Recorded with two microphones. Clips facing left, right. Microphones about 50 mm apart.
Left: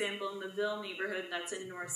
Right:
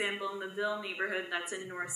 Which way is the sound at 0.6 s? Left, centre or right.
Centre.